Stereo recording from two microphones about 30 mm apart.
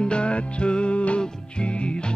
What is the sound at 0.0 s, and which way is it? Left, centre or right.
Music, left.